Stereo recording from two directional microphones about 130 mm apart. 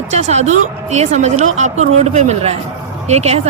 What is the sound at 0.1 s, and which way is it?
Speech, 60° right (ahead or behind).